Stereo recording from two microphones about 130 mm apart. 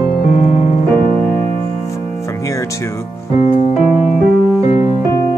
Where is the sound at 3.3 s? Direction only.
60° left (ahead or behind).